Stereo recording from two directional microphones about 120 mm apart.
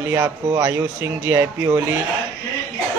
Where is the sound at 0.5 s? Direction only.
15° right (ahead or behind).